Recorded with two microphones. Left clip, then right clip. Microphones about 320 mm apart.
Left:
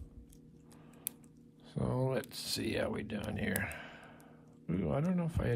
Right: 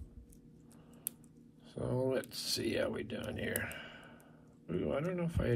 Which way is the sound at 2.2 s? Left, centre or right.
Left.